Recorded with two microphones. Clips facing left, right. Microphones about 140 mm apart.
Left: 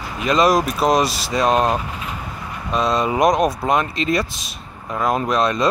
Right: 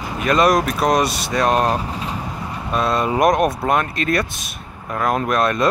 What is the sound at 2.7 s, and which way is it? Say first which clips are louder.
Speech: even; centre (ahead or behind).